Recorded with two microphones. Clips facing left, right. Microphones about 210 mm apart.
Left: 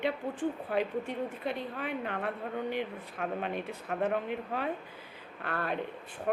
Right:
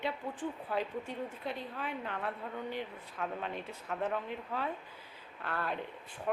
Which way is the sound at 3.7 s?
60° left (ahead or behind).